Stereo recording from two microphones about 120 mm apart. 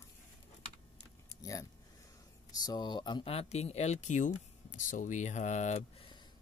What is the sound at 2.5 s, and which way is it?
Speech, 35° left (ahead or behind).